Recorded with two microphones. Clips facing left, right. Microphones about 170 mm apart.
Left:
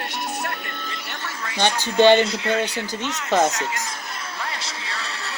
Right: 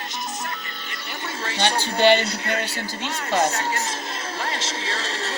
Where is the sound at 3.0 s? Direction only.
35° right (ahead or behind).